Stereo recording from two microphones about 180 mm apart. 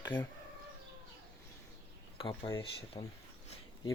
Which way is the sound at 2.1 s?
30° left (ahead or behind).